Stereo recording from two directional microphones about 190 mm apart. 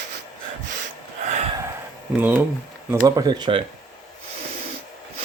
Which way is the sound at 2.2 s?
10° right (ahead or behind).